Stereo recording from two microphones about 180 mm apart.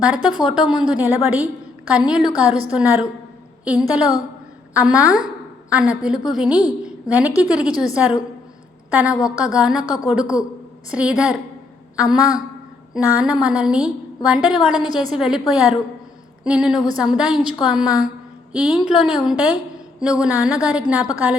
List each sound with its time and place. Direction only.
0.0 s a woman's voice: 5° right (ahead or behind)
6.8 s a sound: 10° right (ahead or behind)
7.4 s a woman's voice: 5° right (ahead or behind)
9.1 s a woman's voice: 20° left (ahead or behind)
9.4 s a woman's voice: 5° right (ahead or behind)